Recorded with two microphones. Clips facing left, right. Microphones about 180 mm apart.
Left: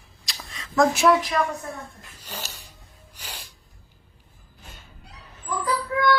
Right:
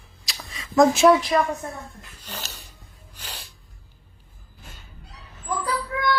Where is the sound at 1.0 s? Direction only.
25° right (ahead or behind).